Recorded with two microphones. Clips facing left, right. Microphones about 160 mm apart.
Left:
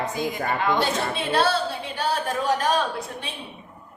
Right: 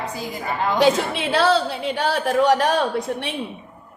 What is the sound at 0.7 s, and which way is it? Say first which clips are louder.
A woman's voice: right 6 dB; 90° right.